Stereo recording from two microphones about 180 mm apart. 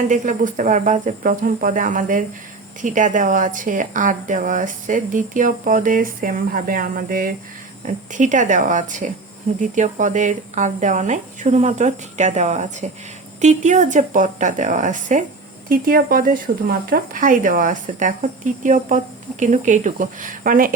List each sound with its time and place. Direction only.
0.1 s speech: 45° right (ahead or behind)
15.7 s speech: 55° right (ahead or behind)